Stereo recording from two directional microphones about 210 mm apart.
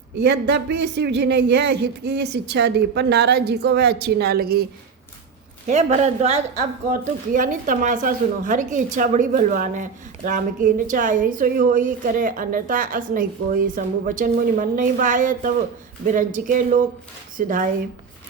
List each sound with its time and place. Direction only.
0.2 s speech: 55° right (ahead or behind)
5.6 s a woman's voice: 35° right (ahead or behind)